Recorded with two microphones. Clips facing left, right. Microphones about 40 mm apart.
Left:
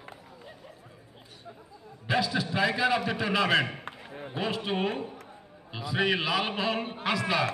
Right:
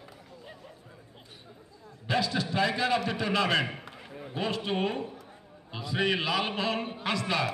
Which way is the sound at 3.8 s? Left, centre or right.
Left.